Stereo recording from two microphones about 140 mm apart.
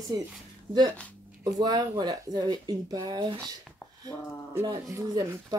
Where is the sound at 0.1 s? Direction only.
30° right (ahead or behind).